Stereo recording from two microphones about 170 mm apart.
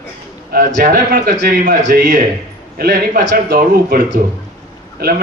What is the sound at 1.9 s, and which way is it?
Speech, 75° right (ahead or behind).